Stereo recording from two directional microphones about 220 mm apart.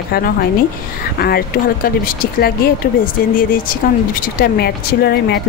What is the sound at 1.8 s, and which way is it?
Speech, 45° left (ahead or behind).